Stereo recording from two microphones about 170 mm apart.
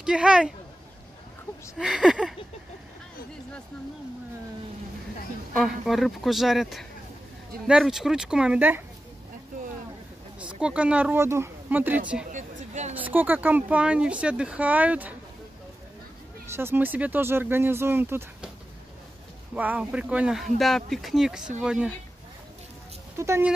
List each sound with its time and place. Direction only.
0.0 s speech: 5° right (ahead or behind)
1.8 s speech: 5° right (ahead or behind)
5.5 s speech: centre (ahead or behind)
10.6 s speech: 5° right (ahead or behind)
12.3 s a sound: 45° right (ahead or behind)
12.9 s speech: 10° right (ahead or behind)
16.5 s speech: 10° right (ahead or behind)
19.5 s speech: 10° right (ahead or behind)
23.1 s speech: 15° right (ahead or behind)